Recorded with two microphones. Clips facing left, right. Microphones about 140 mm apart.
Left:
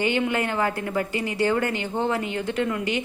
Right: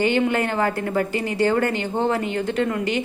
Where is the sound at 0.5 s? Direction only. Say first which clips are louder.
Right 3 dB; 45° right (ahead or behind).